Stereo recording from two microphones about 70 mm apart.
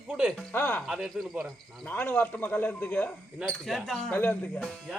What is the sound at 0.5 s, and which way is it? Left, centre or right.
Speech, left.